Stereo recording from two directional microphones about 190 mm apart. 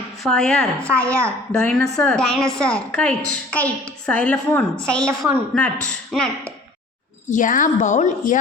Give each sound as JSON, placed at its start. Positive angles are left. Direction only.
{"t": 0.2, "sound": "a woman's voice", "side_deg": 5}
{"t": 7.3, "sound": "a woman's voice", "side_deg": 45}